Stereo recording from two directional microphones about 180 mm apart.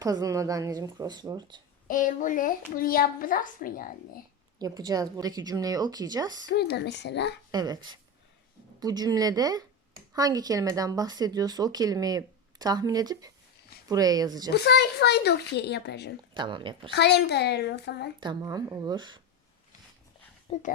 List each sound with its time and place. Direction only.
0.0 s speech: 20° right (ahead or behind)
1.9 s a woman's voice: 45° left (ahead or behind)
4.6 s speech: 20° right (ahead or behind)
6.6 s speech: 65° left (ahead or behind)
7.5 s speech: 20° right (ahead or behind)
14.5 s speech: 65° left (ahead or behind)
16.3 s speech: 25° right (ahead or behind)
16.9 s speech: 70° left (ahead or behind)
18.2 s speech: 25° right (ahead or behind)
20.5 s a woman's voice: 45° left (ahead or behind)